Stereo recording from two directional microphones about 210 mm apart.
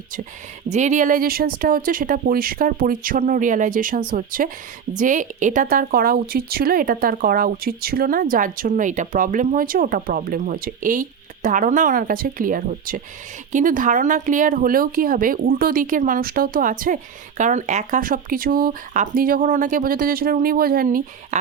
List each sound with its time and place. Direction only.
0.7 s speech: 35° right (ahead or behind)